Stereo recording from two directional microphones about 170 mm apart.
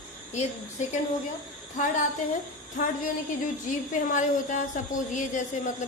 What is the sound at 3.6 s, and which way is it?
A woman's voice, 50° left (ahead or behind).